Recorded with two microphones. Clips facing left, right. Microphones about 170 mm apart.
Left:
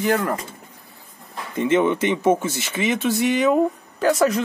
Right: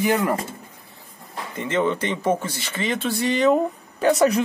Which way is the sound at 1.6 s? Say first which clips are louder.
Left 4 dB; 15° left (ahead or behind).